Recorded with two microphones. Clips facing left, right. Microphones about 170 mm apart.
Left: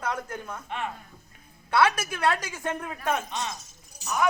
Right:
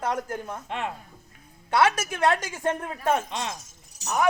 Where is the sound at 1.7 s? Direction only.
25° right (ahead or behind).